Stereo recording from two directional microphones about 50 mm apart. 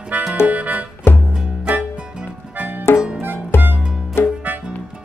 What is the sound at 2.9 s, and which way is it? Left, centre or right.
Music, left.